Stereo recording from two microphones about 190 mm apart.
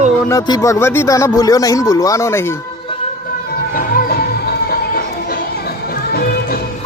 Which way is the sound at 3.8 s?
50° left (ahead or behind).